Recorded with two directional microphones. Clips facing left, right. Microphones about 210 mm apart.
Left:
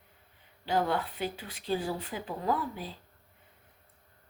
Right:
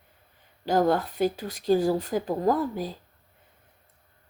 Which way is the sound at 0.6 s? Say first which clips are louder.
Right 7 dB; 40° right (ahead or behind).